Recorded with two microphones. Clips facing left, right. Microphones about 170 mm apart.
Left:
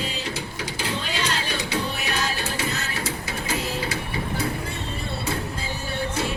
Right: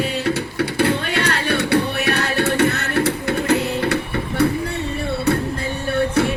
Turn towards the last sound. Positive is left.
turn(degrees=-65)  # may be behind; listen again after turning